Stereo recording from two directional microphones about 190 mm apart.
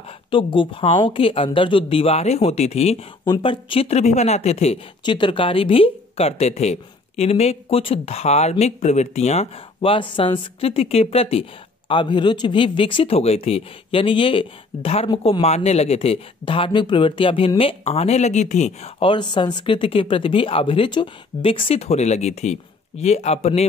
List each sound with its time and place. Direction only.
0.3 s speech: 25° left (ahead or behind)